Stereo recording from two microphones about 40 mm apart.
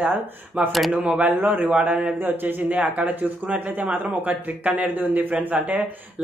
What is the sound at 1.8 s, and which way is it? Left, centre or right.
Speech, right.